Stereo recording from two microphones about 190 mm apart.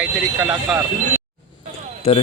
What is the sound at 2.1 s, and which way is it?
Speech, 30° left (ahead or behind).